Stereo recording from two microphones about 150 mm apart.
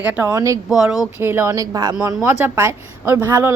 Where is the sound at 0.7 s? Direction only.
5° right (ahead or behind).